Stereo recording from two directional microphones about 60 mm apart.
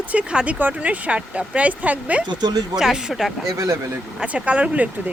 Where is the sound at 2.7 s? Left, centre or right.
Centre.